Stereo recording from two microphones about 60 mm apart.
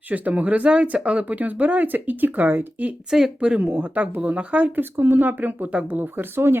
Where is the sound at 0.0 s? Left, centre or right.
Right.